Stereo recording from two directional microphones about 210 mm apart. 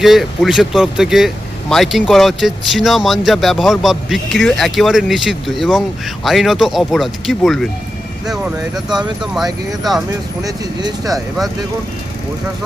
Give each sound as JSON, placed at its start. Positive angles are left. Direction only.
{"t": 0.0, "sound": "speech", "side_deg": 0}
{"t": 9.3, "sound": "speech", "side_deg": 0}
{"t": 10.4, "sound": "speech", "side_deg": -20}